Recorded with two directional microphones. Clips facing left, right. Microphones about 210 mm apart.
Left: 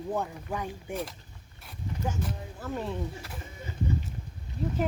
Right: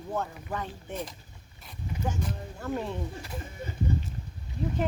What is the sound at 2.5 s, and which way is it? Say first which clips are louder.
Speech: right 1 dB; centre (ahead or behind).